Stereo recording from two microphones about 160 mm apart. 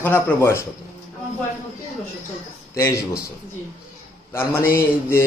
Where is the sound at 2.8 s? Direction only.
15° left (ahead or behind).